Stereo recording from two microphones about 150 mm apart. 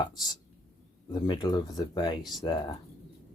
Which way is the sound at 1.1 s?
30° left (ahead or behind).